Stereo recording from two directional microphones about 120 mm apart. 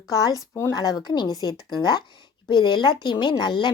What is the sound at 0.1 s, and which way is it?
A woman's voice, 30° left (ahead or behind).